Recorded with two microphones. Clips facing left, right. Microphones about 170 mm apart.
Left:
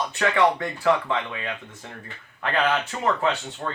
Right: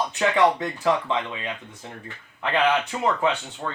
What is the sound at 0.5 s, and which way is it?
Speech, 20° right (ahead or behind).